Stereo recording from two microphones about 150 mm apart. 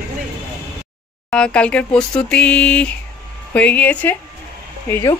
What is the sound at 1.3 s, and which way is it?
Speech, 5° left (ahead or behind).